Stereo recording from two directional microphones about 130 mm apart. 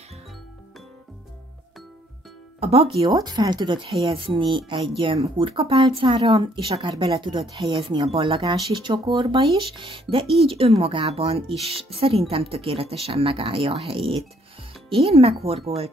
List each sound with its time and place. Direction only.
2.6 s speech: 50° right (ahead or behind)
3.0 s speech: 30° right (ahead or behind); by 15.9 s 50° right (ahead or behind)